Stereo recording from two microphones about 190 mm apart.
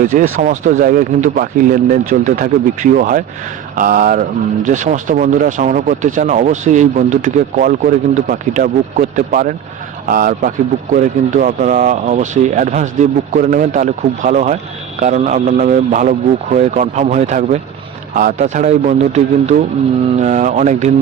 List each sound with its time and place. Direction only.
0.0 s speech: 45° right (ahead or behind)